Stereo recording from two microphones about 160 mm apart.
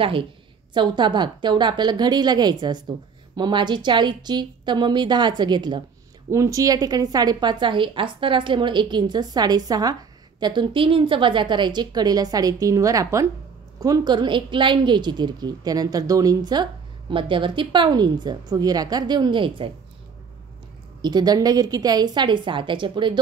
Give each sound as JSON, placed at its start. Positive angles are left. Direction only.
{"t": 0.7, "sound": "a woman's voice", "side_deg": -30}
{"t": 21.0, "sound": "a woman's voice", "side_deg": -25}